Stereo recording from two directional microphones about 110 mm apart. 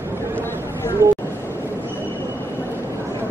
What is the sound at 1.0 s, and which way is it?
Vehicle, 25° right (ahead or behind).